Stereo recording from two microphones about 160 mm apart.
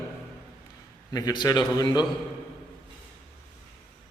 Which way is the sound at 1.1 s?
25° left (ahead or behind).